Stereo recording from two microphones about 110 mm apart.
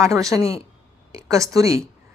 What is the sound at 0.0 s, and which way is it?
A woman's voice, 30° right (ahead or behind).